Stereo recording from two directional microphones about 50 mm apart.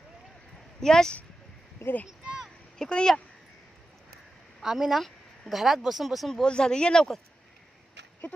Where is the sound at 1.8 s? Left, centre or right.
Left.